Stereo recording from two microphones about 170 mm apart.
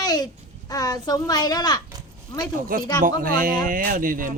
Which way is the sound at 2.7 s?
55° right (ahead or behind).